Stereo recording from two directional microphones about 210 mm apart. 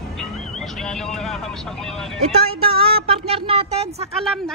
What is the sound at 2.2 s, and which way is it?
Speech, 30° right (ahead or behind).